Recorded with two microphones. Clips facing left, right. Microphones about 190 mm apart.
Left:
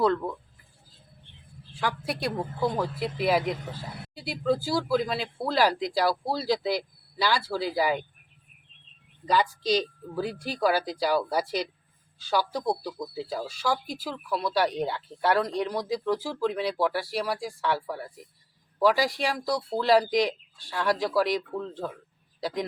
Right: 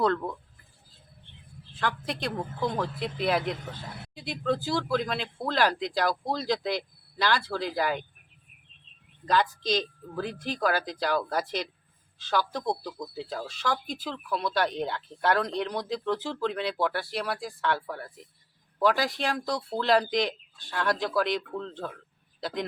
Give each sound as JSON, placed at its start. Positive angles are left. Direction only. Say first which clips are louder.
{"t": 0.0, "sound": "speech", "louder": "left 2 dB", "side_deg": 5}
{"t": 1.8, "sound": "speech", "louder": "left 1 dB", "side_deg": 10}
{"t": 9.2, "sound": "speech", "louder": "left 1 dB", "side_deg": 10}